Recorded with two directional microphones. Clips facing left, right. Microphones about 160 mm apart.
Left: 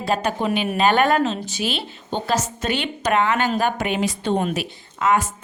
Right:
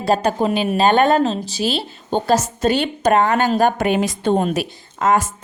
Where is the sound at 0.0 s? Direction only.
35° right (ahead or behind).